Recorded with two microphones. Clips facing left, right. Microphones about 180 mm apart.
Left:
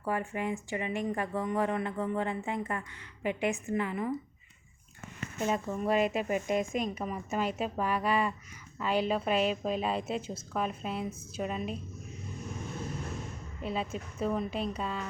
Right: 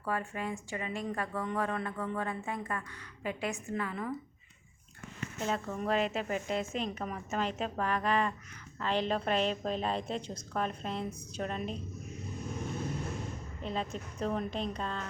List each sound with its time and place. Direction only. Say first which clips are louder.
0.0 s a woman's voice: left 3 dB; 15° left (ahead or behind)
5.4 s a woman's voice: left 3 dB; 15° left (ahead or behind)
13.6 s a woman's voice: left 2 dB; 5° left (ahead or behind)